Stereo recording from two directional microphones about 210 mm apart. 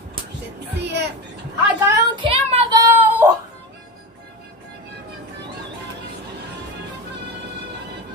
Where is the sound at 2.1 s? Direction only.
25° right (ahead or behind).